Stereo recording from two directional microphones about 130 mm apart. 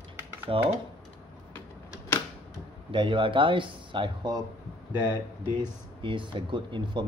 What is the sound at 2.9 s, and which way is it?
Speech, 40° right (ahead or behind).